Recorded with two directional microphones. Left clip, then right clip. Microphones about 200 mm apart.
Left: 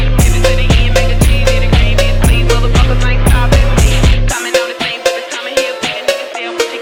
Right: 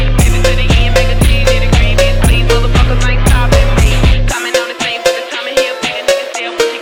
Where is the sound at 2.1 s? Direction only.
15° left (ahead or behind).